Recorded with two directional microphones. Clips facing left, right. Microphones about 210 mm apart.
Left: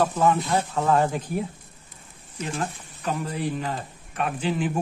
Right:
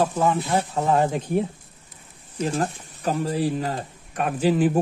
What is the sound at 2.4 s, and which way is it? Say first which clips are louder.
Speech: right 5 dB; 35° right (ahead or behind).